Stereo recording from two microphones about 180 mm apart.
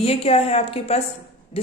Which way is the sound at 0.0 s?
35° left (ahead or behind).